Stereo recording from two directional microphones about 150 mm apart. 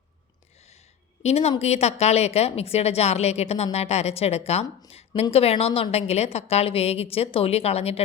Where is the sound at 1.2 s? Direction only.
45° left (ahead or behind).